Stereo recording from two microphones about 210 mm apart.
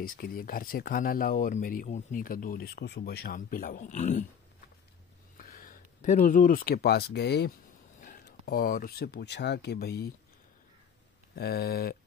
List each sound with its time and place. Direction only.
0.0 s speech: 45° left (ahead or behind)
5.4 s speech: 40° left (ahead or behind)
8.0 s speech: 40° left (ahead or behind)
11.3 s speech: 50° left (ahead or behind)